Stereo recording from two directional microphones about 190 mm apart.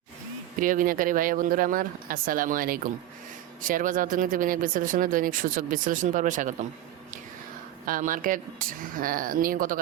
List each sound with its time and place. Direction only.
0.6 s speech: 45° right (ahead or behind)
7.9 s speech: 45° right (ahead or behind)